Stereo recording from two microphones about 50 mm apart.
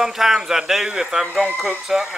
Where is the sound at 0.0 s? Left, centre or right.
Centre.